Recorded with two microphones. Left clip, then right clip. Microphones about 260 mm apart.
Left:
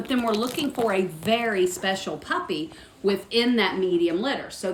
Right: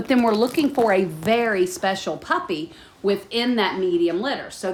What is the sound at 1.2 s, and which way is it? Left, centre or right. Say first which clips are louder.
A woman's voice: right 3 dB; centre.